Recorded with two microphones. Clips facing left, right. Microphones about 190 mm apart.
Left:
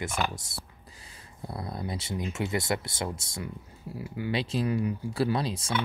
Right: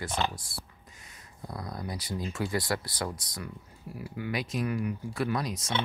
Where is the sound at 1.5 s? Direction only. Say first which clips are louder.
Left 2 dB; 25° left (ahead or behind).